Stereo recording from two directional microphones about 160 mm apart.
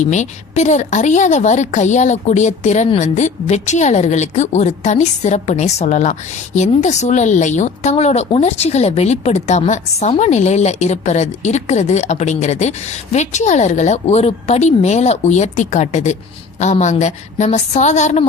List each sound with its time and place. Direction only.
0.0 s a woman's voice: 45° left (ahead or behind)